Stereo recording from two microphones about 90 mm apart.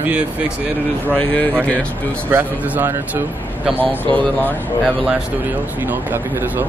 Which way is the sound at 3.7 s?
15° left (ahead or behind).